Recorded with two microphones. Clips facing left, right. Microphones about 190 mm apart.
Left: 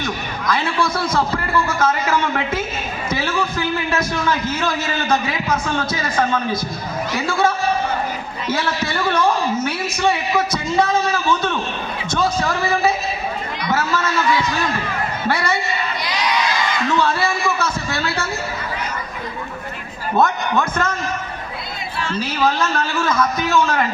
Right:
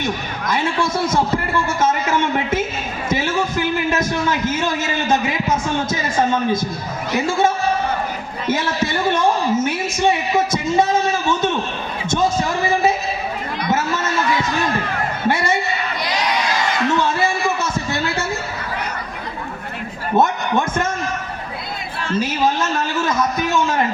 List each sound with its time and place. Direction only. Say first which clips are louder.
0.0 s a man's voice: right 1 dB; 20° right (ahead or behind)
3.2 s a sound: right 1 dB; 20° right (ahead or behind)
4.3 s a woman's voice: right 1 dB; 20° right (ahead or behind)
7.3 s a woman's voice: even; 20° right (ahead or behind)
12.1 s a sound: right 1 dB; 20° right (ahead or behind)
15.3 s a woman's voice: right 2 dB; 25° right (ahead or behind)
16.0 s crowd: right 1 dB; 45° right (ahead or behind)
17.0 s speech: even; 20° right (ahead or behind)
20.1 s a woman's voice: right 1 dB; 25° right (ahead or behind)
22.0 s chatter: right 4 dB; 45° right (ahead or behind)
22.4 s a woman's voice: left 4 dB; 20° right (ahead or behind)